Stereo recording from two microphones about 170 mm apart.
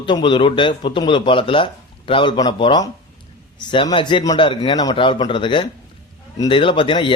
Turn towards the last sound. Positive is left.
turn(degrees=30)  # may be behind; listen again after turning